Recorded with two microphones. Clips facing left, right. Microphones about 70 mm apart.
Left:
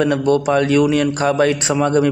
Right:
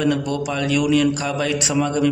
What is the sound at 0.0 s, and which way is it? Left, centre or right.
A man's voice, left.